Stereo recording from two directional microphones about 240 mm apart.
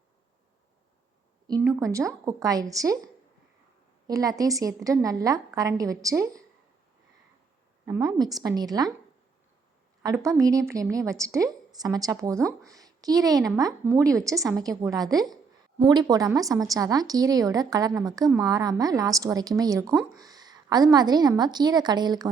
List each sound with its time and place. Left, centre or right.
1.5 s a woman's voice: centre
4.0 s a woman's voice: centre
7.9 s a woman's voice: centre
10.0 s a woman's voice: centre